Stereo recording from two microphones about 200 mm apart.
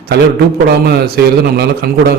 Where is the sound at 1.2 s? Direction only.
55° right (ahead or behind).